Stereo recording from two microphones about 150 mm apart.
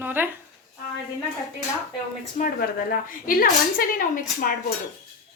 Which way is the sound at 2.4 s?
70° left (ahead or behind).